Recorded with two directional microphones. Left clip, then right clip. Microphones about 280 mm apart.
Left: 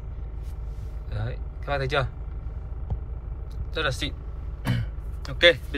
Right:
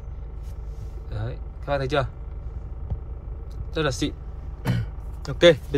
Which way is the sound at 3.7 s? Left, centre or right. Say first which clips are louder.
Right 2 dB; right.